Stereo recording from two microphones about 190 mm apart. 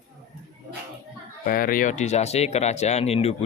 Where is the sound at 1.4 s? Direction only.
50° left (ahead or behind).